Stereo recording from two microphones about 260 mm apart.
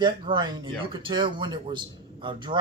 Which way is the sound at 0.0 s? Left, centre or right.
Centre.